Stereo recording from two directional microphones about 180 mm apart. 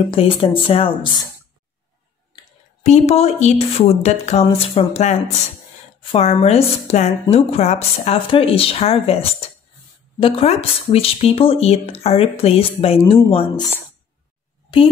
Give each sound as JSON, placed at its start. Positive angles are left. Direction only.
{"t": 0.1, "sound": "speech", "side_deg": 30}
{"t": 2.8, "sound": "a woman's voice", "side_deg": 35}
{"t": 14.7, "sound": "speech", "side_deg": 30}